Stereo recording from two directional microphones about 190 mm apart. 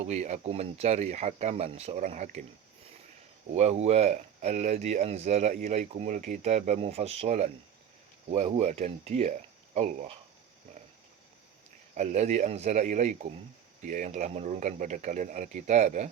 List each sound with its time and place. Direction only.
0.0 s speech: 35° right (ahead or behind)
3.5 s speech: 35° right (ahead or behind)
11.9 s speech: 35° right (ahead or behind)